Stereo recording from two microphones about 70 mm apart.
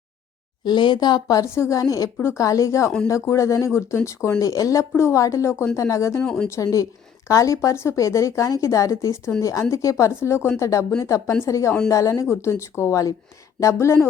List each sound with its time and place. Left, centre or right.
0.6 s speech: left
1.4 s speech: left
10.6 s speech: left